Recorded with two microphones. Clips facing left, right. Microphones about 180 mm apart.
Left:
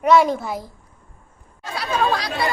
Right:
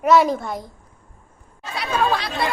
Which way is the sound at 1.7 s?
Centre (ahead or behind).